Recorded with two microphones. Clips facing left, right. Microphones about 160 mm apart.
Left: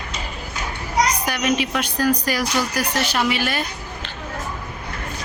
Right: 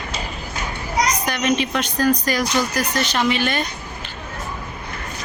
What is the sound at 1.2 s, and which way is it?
Speech, 10° left (ahead or behind).